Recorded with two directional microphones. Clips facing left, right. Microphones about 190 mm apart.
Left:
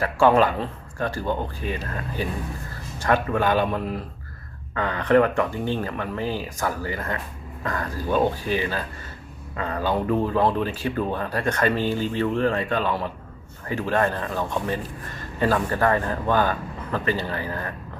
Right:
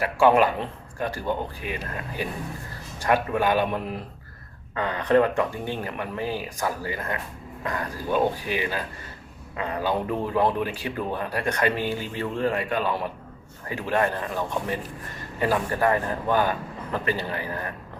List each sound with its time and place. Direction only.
0.0 s speech: 10° right (ahead or behind)